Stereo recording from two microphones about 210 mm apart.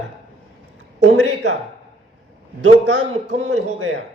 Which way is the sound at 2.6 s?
60° right (ahead or behind).